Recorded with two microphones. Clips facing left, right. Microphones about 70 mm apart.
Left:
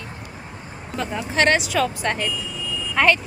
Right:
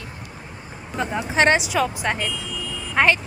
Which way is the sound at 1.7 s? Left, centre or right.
Centre.